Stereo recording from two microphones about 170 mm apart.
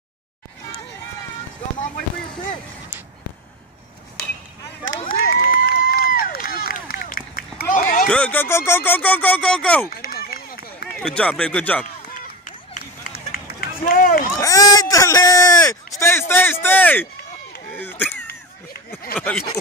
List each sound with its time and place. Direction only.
5.0 s crowd: 60° left (ahead or behind)
7.7 s a sound: 50° left (ahead or behind)
8.1 s speech: 10° left (ahead or behind)
9.8 s run: 60° left (ahead or behind)
11.0 s speech: 5° left (ahead or behind)
12.7 s run: 60° left (ahead or behind)
14.4 s speech: 20° left (ahead or behind)